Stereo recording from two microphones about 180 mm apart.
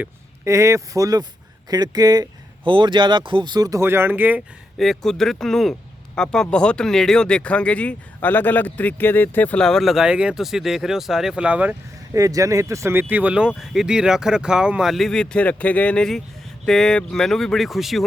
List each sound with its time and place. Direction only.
0.0 s speech: 15° right (ahead or behind)
12.1 s speech: 20° right (ahead or behind); by 18.0 s centre (ahead or behind)